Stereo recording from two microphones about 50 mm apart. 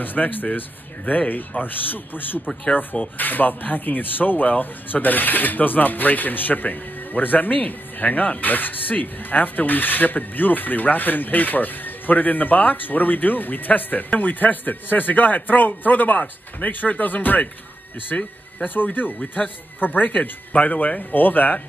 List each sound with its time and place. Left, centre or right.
0.0 s speech: left